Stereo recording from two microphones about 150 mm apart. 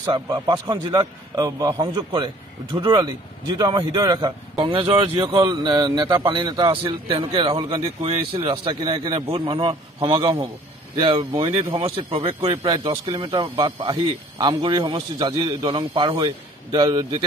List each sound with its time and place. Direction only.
0.0 s a man's voice: 25° right (ahead or behind)